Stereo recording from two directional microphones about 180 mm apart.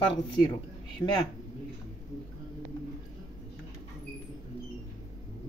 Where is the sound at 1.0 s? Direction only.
15° left (ahead or behind).